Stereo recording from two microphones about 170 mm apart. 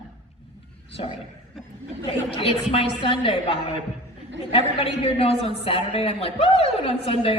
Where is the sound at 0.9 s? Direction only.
35° left (ahead or behind).